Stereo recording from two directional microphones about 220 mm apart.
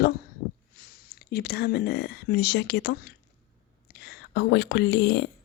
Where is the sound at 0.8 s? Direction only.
45° left (ahead or behind).